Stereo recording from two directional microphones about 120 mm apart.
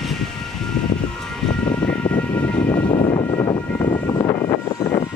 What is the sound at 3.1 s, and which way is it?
Vehicle, 40° left (ahead or behind).